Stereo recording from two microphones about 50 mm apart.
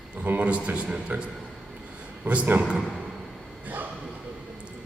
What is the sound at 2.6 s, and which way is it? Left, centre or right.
Speech, centre.